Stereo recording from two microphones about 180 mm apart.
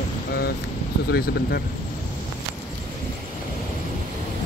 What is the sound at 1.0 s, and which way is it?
Speech, 60° left (ahead or behind).